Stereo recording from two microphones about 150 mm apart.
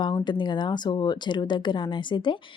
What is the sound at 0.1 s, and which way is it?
Speech, 25° left (ahead or behind).